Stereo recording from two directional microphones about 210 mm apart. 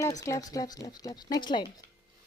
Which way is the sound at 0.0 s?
15° left (ahead or behind).